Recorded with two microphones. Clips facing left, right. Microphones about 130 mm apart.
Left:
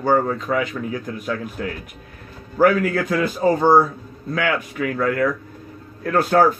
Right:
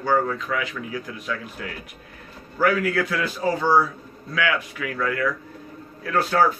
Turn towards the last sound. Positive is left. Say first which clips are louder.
# left 4 dB
turn(degrees=50)  # may be behind; listen again after turning